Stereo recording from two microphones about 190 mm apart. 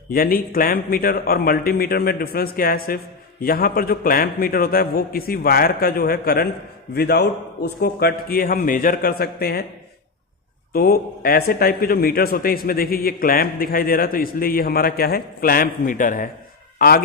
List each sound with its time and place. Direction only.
0.1 s speech: 50° left (ahead or behind)
10.7 s speech: 50° left (ahead or behind)